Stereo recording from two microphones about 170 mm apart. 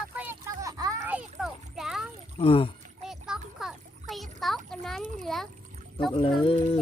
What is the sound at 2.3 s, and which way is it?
Speech, 35° left (ahead or behind).